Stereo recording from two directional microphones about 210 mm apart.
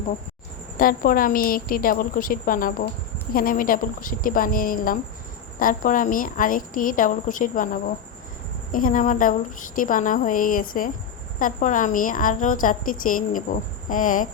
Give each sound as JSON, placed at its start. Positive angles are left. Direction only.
{"t": 0.8, "sound": "a woman's voice", "side_deg": 40}